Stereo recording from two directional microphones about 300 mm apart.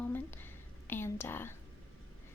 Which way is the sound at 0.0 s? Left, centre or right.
Centre.